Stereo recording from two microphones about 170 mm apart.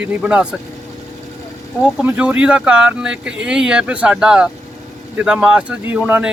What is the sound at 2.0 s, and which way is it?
Speech, 5° right (ahead or behind).